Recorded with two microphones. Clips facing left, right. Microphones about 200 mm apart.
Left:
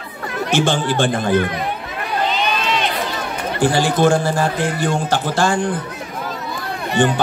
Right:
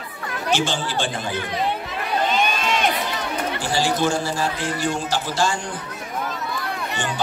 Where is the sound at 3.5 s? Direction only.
55° left (ahead or behind).